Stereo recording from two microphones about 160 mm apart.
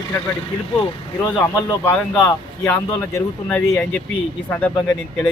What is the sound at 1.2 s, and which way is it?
Speech, 15° left (ahead or behind).